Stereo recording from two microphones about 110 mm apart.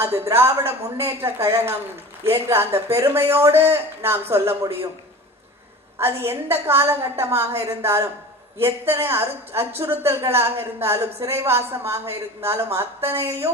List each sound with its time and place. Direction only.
0.0 s a woman's voice: 25° right (ahead or behind)
6.0 s a woman's voice: 20° right (ahead or behind)
13.1 s a woman's voice: 65° right (ahead or behind)